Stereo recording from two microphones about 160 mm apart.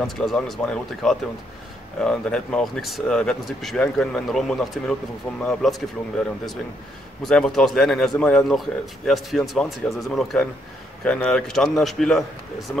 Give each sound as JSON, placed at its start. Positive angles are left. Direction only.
{"t": 0.0, "sound": "a man's voice", "side_deg": 0}
{"t": 7.2, "sound": "a man's voice", "side_deg": 5}